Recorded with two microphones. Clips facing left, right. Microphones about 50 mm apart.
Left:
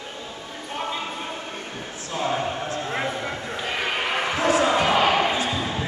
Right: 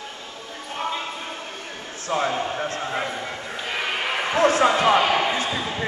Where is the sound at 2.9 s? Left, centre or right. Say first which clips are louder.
Left 1 dB; centre.